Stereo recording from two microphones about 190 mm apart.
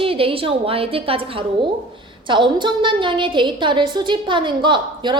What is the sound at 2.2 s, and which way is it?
A woman's voice, 25° right (ahead or behind).